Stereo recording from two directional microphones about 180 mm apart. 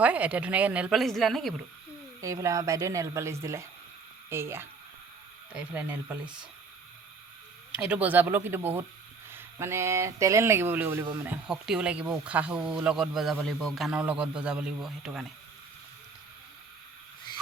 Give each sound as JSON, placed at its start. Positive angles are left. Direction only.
{"t": 0.0, "sound": "speech", "side_deg": -5}
{"t": 2.2, "sound": "speech", "side_deg": -15}
{"t": 7.7, "sound": "speech", "side_deg": -5}